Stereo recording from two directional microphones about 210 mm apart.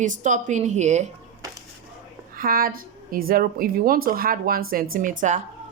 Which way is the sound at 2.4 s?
45° right (ahead or behind).